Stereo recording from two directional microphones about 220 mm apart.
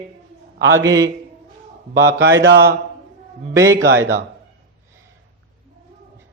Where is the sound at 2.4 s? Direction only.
50° right (ahead or behind).